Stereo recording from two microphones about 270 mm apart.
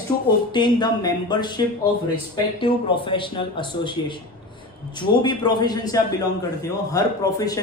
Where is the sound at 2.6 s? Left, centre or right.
Centre.